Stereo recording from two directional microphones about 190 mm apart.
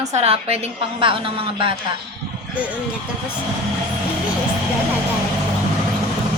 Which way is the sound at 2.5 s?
5° right (ahead or behind).